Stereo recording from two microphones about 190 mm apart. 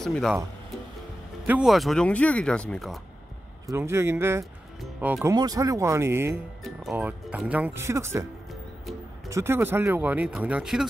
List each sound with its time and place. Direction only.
0.0 s speech: centre (ahead or behind)
1.5 s speech: centre (ahead or behind)
3.6 s speech: 15° right (ahead or behind)
5.3 s speech: 20° right (ahead or behind)
9.3 s speech: 15° right (ahead or behind)